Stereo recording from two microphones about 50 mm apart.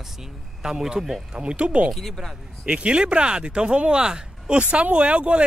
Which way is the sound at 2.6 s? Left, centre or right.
Right.